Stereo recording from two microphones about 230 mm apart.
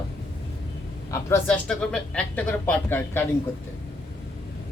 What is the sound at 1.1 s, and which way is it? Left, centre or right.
Speech, centre.